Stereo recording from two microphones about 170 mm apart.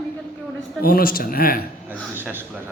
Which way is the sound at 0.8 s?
60° left (ahead or behind).